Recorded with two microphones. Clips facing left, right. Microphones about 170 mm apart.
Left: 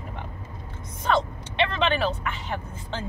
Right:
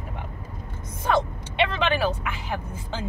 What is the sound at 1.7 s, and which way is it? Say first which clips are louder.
Speech: even; 5° right (ahead or behind).